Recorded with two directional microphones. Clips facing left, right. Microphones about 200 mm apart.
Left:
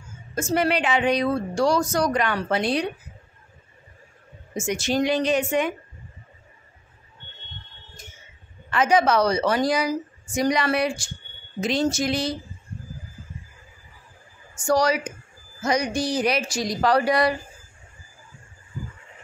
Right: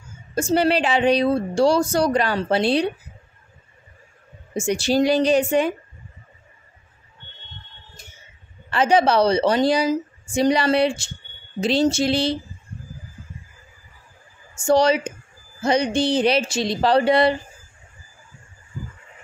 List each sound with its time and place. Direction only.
0.3 s a woman's voice: 30° right (ahead or behind)
4.6 s a woman's voice: 30° right (ahead or behind)
8.6 s a woman's voice: 30° right (ahead or behind)
14.6 s a woman's voice: 25° right (ahead or behind)